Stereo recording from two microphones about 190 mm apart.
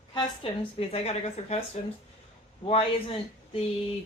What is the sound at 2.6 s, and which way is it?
Speech, 30° left (ahead or behind).